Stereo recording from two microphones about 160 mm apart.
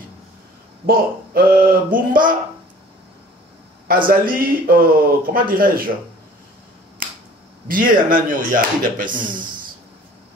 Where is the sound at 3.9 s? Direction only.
65° right (ahead or behind).